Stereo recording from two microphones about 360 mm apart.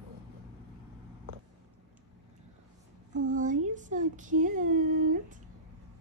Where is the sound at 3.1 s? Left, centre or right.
Right.